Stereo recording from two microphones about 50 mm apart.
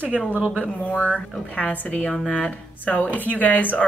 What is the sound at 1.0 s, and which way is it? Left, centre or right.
Speech, left.